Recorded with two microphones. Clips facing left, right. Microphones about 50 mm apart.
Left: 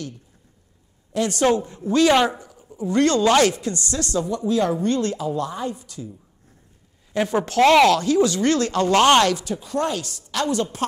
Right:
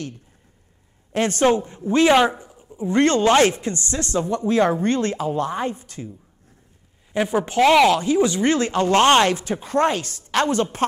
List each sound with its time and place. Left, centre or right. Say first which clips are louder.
1.1 s a woman's voice: right 1 dB; right
7.1 s a woman's voice: even; centre; by 10.9 s right